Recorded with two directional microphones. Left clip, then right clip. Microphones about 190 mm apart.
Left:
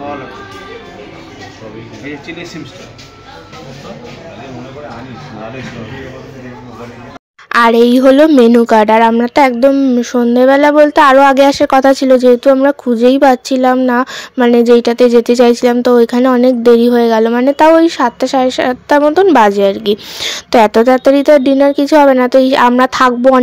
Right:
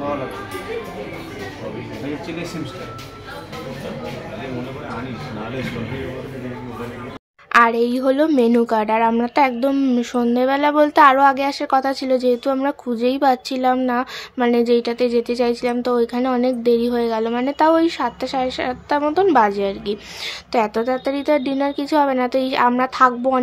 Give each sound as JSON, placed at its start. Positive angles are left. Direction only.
{"t": 7.5, "sound": "a woman's voice", "side_deg": 40}